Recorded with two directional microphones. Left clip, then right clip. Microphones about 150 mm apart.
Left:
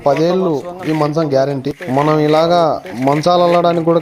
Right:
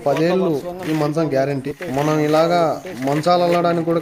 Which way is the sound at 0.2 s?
25° left (ahead or behind).